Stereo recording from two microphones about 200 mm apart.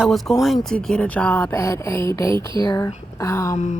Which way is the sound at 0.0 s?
Centre (ahead or behind).